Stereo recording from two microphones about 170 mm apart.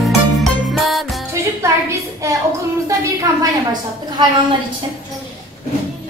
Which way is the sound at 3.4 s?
25° right (ahead or behind).